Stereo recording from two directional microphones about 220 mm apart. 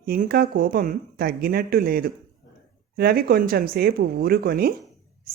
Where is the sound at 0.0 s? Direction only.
45° right (ahead or behind).